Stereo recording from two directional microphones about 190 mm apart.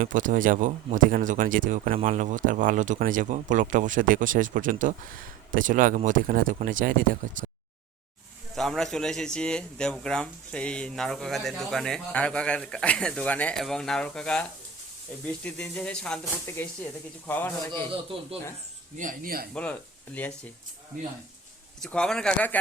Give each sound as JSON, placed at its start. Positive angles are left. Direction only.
{"t": 0.0, "sound": "speech", "side_deg": -45}
{"t": 8.5, "sound": "speech", "side_deg": 0}
{"t": 15.4, "sound": "a man's voice", "side_deg": 5}
{"t": 18.9, "sound": "speech", "side_deg": -45}
{"t": 20.1, "sound": "a man's voice", "side_deg": 5}
{"t": 21.8, "sound": "speech", "side_deg": 5}